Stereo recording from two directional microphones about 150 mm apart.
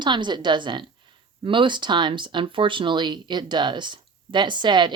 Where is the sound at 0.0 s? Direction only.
30° right (ahead or behind).